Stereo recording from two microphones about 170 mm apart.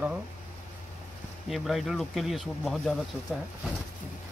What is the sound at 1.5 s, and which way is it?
Speech, centre (ahead or behind).